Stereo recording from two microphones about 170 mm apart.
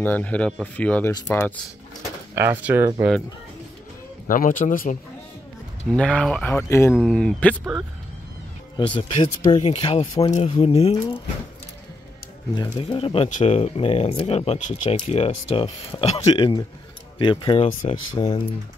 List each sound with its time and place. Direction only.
0.0 s speech: 10° left (ahead or behind)
1.1 s speech: 20° left (ahead or behind)
2.3 s speech: 10° right (ahead or behind)
3.0 s speech: centre (ahead or behind)
4.3 s speech: 50° left (ahead or behind)
5.9 s speech: 5° left (ahead or behind)
8.7 s speech: 30° left (ahead or behind)
9.6 s speech: 35° left (ahead or behind)
12.5 s speech: 25° left (ahead or behind)